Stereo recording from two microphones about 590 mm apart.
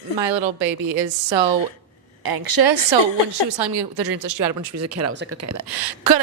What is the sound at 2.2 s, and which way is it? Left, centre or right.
Speech, right.